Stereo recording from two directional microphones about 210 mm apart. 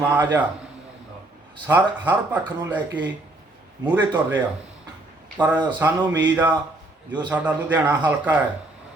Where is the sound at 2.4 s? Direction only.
15° right (ahead or behind).